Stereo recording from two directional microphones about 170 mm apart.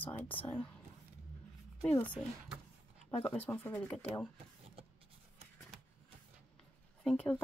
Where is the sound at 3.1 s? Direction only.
35° left (ahead or behind).